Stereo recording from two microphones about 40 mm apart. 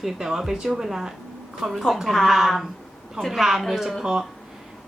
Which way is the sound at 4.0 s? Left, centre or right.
Centre.